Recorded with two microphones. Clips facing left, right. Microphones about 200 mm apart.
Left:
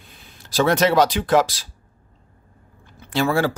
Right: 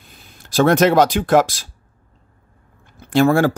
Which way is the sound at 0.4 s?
50° right (ahead or behind).